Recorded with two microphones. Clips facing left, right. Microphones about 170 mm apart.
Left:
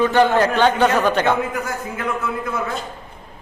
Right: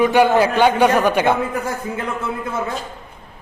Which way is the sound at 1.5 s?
30° right (ahead or behind).